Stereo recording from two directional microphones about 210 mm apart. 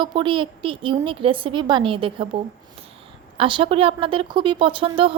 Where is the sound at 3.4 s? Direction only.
25° right (ahead or behind).